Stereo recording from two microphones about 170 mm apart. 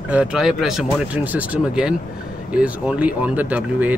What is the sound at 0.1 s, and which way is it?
Speech, 5° right (ahead or behind).